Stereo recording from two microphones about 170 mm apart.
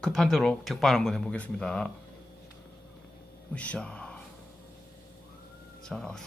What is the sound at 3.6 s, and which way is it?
Speech, 5° left (ahead or behind).